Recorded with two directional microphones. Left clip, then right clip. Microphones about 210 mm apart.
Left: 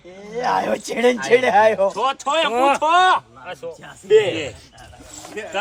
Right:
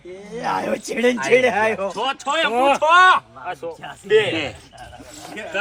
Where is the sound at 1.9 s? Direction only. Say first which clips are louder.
Left 2 dB; 30° left (ahead or behind).